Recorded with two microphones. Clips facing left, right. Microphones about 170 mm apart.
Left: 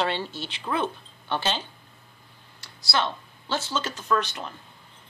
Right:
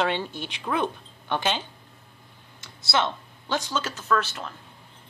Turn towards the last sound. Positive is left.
turn(degrees=-5)  # may be behind; listen again after turning